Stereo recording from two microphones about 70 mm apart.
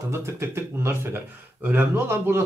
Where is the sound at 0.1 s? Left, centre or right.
Right.